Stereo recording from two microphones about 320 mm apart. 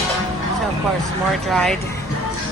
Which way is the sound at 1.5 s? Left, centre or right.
Centre.